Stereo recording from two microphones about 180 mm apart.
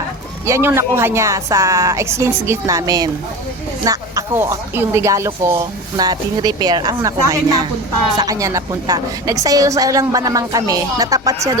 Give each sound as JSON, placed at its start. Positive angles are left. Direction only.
{"t": 0.4, "sound": "a woman's voice", "side_deg": -15}